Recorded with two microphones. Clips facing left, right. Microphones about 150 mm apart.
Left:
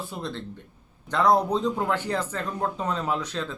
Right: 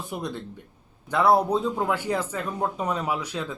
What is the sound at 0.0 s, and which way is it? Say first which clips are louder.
Speech: right 1 dB; 15° right (ahead or behind).